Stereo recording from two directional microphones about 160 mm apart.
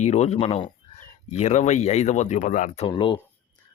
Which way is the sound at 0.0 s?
45° left (ahead or behind).